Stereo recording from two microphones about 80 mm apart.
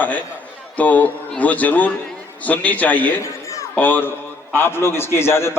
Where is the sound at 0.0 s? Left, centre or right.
Centre.